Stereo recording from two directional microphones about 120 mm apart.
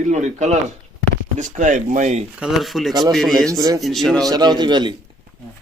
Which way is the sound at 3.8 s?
Centre (ahead or behind).